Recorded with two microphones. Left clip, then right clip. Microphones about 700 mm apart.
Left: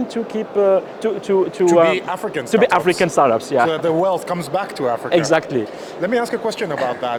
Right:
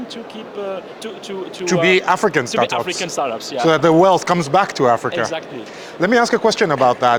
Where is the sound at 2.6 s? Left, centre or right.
Left.